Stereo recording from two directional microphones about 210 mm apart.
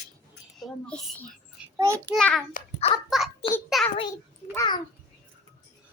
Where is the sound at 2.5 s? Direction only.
30° left (ahead or behind).